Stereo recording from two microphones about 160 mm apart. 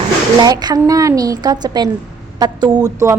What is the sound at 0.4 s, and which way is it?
A woman's voice, 25° right (ahead or behind).